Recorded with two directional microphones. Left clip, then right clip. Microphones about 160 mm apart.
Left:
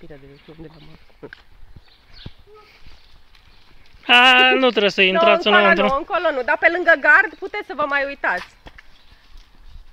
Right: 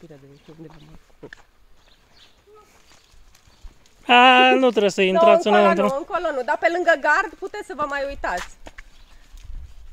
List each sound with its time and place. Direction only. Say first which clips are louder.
4.0 s speech: left 1 dB; 10° right (ahead or behind)
5.7 s speech: left 3 dB; 30° left (ahead or behind)